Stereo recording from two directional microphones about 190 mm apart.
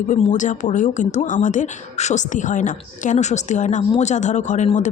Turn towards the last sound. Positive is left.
turn(degrees=40)  # may be behind; listen again after turning